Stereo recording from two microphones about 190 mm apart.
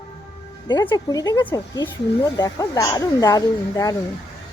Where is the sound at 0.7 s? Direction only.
20° left (ahead or behind).